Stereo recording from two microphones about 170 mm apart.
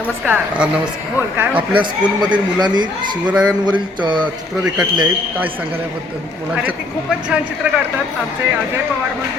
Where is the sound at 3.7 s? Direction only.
30° right (ahead or behind).